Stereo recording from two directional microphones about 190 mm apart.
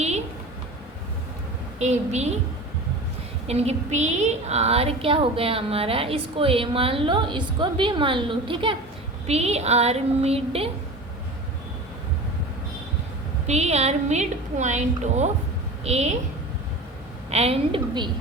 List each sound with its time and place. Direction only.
1.8 s a woman's voice: 35° right (ahead or behind)
3.4 s a woman's voice: 35° right (ahead or behind)
13.5 s a woman's voice: 35° right (ahead or behind)
17.3 s a woman's voice: 30° right (ahead or behind)